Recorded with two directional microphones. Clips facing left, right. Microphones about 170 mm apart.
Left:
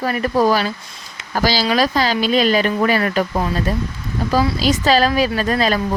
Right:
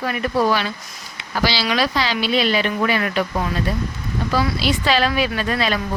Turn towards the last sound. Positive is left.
turn(degrees=40)  # may be behind; listen again after turning